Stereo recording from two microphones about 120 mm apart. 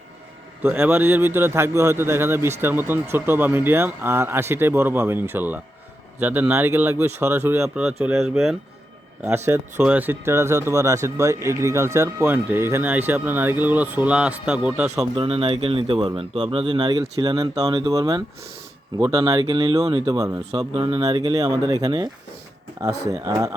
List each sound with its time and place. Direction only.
0.6 s speech: 20° right (ahead or behind)
9.5 s speech: 20° right (ahead or behind)
15.1 s speech: 50° right (ahead or behind); by 20.4 s 30° right (ahead or behind)
20.7 s speech: 40° right (ahead or behind)